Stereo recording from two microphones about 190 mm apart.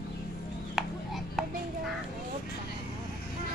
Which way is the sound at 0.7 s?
Centre (ahead or behind).